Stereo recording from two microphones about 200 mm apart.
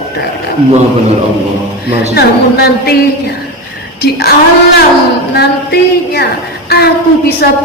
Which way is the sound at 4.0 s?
50° left (ahead or behind).